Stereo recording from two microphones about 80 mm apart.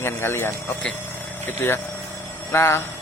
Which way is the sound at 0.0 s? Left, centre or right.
Left.